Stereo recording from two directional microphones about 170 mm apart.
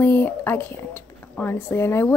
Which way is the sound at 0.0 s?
10° left (ahead or behind).